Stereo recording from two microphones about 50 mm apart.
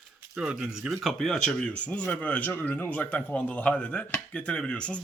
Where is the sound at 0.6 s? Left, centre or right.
Centre.